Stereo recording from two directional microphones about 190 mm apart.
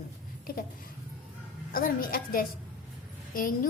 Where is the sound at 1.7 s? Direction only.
50° left (ahead or behind).